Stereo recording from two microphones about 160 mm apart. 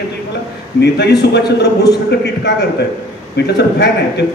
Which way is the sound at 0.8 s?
90° left.